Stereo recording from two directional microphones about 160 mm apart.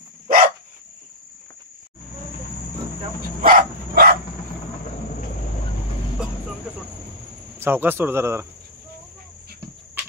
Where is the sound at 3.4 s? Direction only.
65° right (ahead or behind).